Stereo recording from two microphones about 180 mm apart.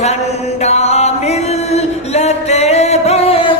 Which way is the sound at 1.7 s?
35° left (ahead or behind).